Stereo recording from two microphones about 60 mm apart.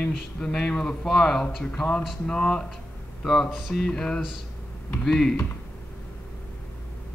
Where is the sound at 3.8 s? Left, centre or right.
Centre.